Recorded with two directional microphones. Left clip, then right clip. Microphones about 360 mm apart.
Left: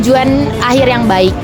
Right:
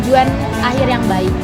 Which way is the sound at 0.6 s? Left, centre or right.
Left.